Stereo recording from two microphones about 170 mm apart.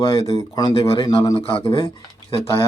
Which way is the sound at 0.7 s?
35° left (ahead or behind).